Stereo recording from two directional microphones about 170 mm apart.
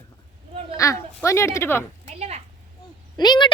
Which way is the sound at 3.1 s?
25° left (ahead or behind).